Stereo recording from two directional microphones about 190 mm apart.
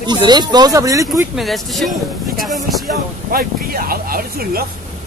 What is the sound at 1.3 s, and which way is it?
Speech, centre (ahead or behind).